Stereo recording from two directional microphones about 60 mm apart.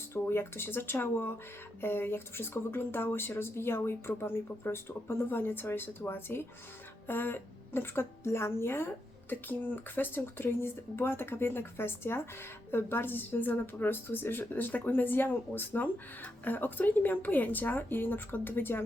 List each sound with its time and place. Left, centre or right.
0.1 s a woman's voice: left